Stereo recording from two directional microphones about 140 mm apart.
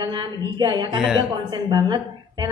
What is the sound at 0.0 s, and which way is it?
A woman's voice, 35° right (ahead or behind).